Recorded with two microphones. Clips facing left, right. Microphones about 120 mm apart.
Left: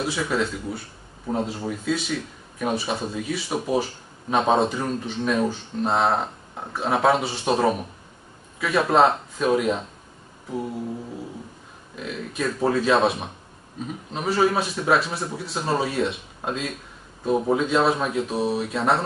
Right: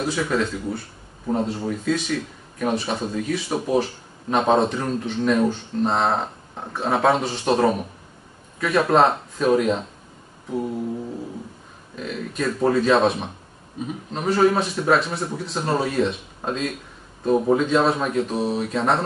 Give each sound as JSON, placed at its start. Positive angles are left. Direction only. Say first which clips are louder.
{"t": 0.0, "sound": "speech", "louder": "right 2 dB", "side_deg": 5}
{"t": 11.9, "sound": "speech", "louder": "right 2 dB", "side_deg": 5}